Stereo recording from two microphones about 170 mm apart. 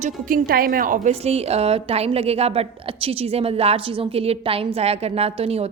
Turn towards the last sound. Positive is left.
turn(degrees=-35)  # may be behind; listen again after turning